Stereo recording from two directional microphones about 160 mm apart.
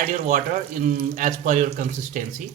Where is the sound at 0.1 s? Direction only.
55° right (ahead or behind).